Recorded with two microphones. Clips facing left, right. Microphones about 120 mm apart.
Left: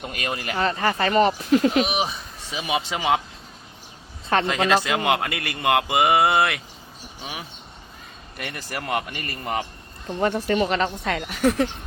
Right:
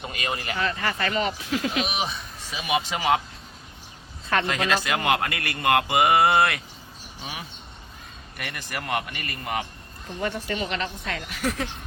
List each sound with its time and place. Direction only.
0.1 s a woman's voice: 50° left (ahead or behind)
0.7 s speech: 30° left (ahead or behind)
1.3 s speech: 40° left (ahead or behind)
1.8 s a man's voice: 25° left (ahead or behind)
4.3 s a man's voice: 25° left (ahead or behind)
8.4 s a man's voice: 25° left (ahead or behind)
10.2 s a woman's voice: 40° left (ahead or behind)
11.3 s a man's voice: 30° left (ahead or behind)